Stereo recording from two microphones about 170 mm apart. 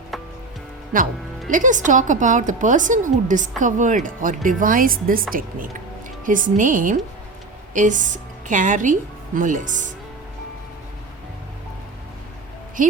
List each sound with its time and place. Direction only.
1.5 s a woman's voice: 50° right (ahead or behind)
12.8 s a woman's voice: 50° right (ahead or behind)